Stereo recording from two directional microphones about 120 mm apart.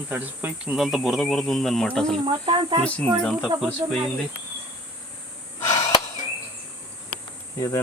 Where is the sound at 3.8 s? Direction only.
35° right (ahead or behind).